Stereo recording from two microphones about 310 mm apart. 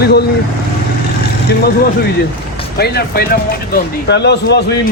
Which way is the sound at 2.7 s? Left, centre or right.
Left.